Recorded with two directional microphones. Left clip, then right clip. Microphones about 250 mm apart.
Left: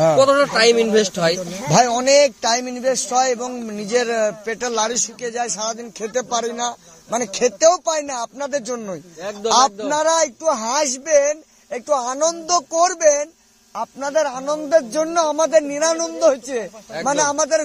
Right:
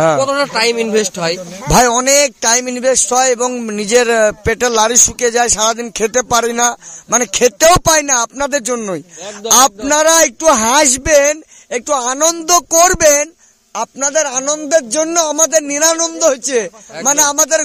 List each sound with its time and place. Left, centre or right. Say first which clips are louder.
0.2 s speech: even; right
1.7 s a man's voice: right 4 dB; right